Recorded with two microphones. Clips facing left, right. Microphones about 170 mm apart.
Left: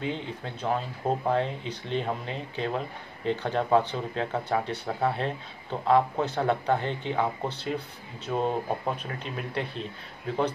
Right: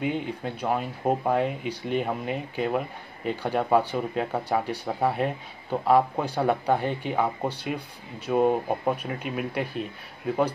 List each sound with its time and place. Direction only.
0.0 s speech: 10° right (ahead or behind)